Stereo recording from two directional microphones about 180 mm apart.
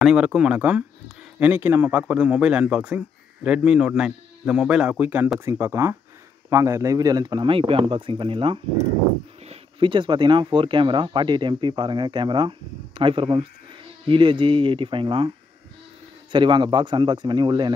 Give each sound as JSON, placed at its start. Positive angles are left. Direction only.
{"t": 0.0, "sound": "speech", "side_deg": -5}